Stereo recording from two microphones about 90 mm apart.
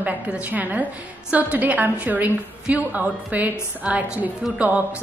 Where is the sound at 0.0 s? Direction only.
15° right (ahead or behind).